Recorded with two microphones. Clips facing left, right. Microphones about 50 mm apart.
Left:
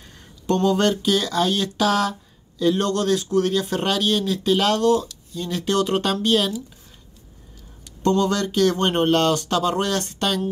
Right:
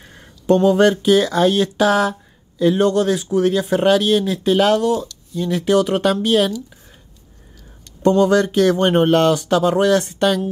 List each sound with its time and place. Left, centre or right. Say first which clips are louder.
0.0 s a sound: right 5 dB; right
0.6 s speech: right 5 dB; centre
8.0 s speech: right 6 dB; right